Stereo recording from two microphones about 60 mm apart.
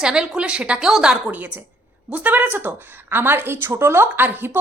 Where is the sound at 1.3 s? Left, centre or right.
Right.